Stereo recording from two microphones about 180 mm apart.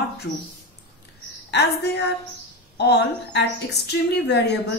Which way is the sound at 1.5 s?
65° left (ahead or behind).